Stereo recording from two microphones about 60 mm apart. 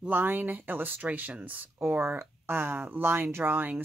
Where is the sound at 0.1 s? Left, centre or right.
Right.